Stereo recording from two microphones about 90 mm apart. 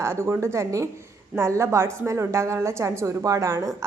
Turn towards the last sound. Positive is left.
turn(degrees=-35)  # may be behind; listen again after turning